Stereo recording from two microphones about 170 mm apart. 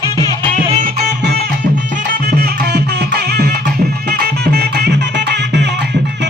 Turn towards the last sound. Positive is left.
turn(degrees=-80)